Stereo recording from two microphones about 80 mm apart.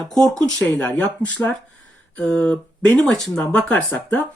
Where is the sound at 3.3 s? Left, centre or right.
Centre.